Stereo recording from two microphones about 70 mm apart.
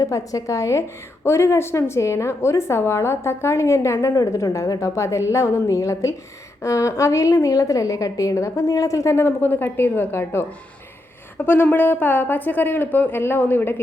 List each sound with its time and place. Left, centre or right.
0.0 s a woman's voice: left